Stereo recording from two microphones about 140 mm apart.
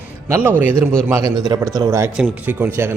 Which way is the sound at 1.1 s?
25° right (ahead or behind).